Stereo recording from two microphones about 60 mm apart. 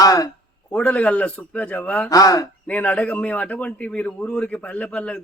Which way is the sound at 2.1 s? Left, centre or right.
Left.